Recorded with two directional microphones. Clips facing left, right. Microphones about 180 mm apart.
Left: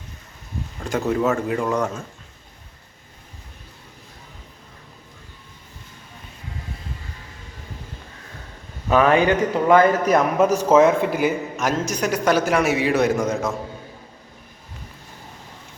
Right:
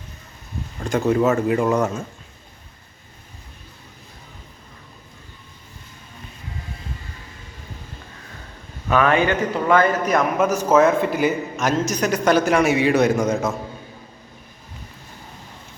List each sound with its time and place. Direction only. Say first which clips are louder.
0.9 s a man's voice: right 3 dB; centre (ahead or behind)
9.2 s a man's voice: left 2 dB; 15° left (ahead or behind)
10.2 s a man's voice: left 2 dB; 35° left (ahead or behind)
10.8 s a man's voice: even; 15° left (ahead or behind)